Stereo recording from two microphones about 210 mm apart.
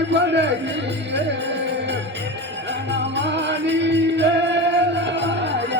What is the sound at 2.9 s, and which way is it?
Music, 55° right (ahead or behind).